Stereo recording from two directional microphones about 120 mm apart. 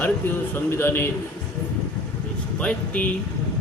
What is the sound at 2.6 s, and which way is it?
Speech, 10° left (ahead or behind).